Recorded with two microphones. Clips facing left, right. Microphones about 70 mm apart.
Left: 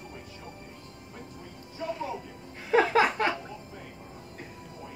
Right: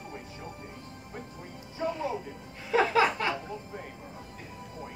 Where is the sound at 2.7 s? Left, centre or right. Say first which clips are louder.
Left 2 dB; left.